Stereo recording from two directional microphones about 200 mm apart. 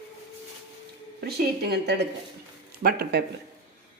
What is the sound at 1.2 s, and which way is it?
A woman's voice, 50° right (ahead or behind).